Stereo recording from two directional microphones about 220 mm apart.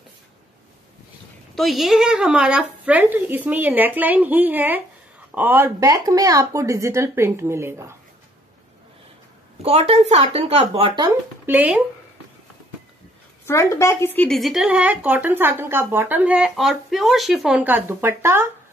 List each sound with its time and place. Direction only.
1.5 s speech: centre (ahead or behind)
9.6 s speech: 30° right (ahead or behind)
11.4 s speech: 5° right (ahead or behind)
13.5 s speech: 10° left (ahead or behind); by 18.5 s 10° right (ahead or behind)